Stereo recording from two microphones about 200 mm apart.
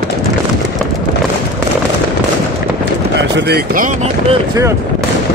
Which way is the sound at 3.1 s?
55° right (ahead or behind).